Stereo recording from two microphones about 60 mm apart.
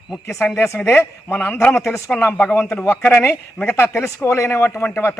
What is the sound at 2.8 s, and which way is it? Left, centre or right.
A man's voice, left.